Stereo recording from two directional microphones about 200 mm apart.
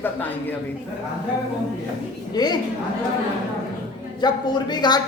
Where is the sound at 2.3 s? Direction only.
20° left (ahead or behind).